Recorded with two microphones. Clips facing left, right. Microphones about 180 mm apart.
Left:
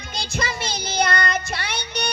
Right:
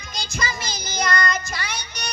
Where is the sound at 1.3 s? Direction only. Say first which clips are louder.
Left 1 dB; 60° left (ahead or behind).